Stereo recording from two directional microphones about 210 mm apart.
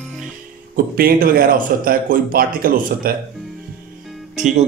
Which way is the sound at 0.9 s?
45° right (ahead or behind).